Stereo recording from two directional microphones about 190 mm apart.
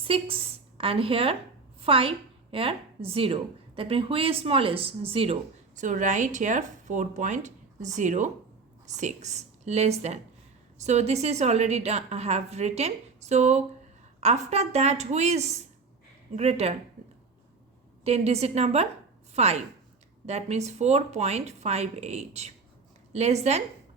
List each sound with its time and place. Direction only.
0.1 s a woman's voice: 30° right (ahead or behind)
18.0 s a woman's voice: 35° right (ahead or behind)